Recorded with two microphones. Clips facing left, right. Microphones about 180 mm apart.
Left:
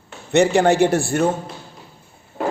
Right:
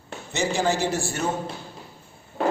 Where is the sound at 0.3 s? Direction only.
65° left (ahead or behind).